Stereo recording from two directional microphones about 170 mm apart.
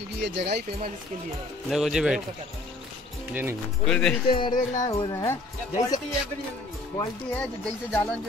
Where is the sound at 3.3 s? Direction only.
15° right (ahead or behind).